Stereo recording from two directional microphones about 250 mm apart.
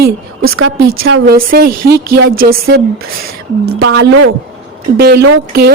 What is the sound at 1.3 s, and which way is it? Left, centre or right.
A woman's voice, right.